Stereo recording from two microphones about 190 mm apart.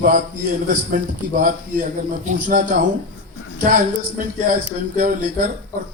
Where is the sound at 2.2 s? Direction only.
40° right (ahead or behind).